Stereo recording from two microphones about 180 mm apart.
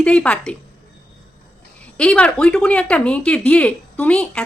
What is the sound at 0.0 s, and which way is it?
Speech, 5° left (ahead or behind).